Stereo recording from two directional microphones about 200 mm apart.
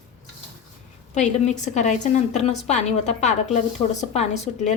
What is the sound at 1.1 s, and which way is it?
Speech, 35° left (ahead or behind).